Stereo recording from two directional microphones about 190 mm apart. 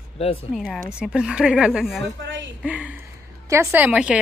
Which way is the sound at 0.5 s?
Centre (ahead or behind).